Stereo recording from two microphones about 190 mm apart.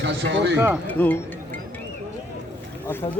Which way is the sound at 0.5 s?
5° right (ahead or behind).